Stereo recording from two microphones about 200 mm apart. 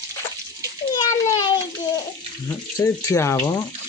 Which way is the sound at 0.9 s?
15° left (ahead or behind).